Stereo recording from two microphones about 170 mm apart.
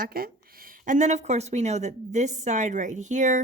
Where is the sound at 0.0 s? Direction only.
60° right (ahead or behind).